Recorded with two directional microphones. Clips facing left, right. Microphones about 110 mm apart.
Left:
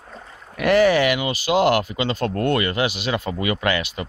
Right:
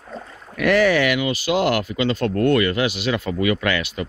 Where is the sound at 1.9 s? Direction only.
20° left (ahead or behind).